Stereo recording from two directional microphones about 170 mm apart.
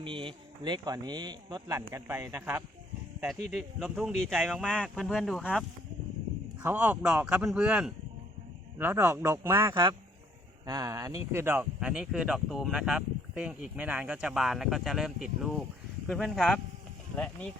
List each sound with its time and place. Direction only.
0.0 s speech: 30° right (ahead or behind)
1.8 s a man's voice: 10° right (ahead or behind)
3.5 s a man's voice: centre (ahead or behind)